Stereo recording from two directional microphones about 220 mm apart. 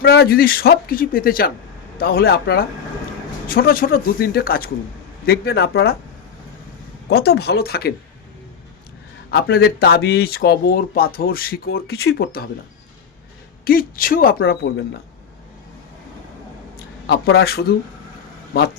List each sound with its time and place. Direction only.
0.0 s speech: 45° left (ahead or behind)
7.1 s speech: 45° left (ahead or behind)
9.3 s speech: 45° left (ahead or behind)
13.7 s speech: 40° left (ahead or behind)
17.3 s speech: 45° left (ahead or behind)